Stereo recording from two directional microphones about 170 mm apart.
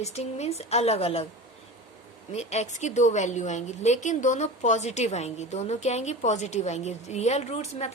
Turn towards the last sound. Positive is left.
turn(degrees=40)  # may be behind; listen again after turning